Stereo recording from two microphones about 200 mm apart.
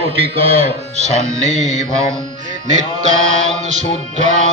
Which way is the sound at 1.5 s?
35° left (ahead or behind).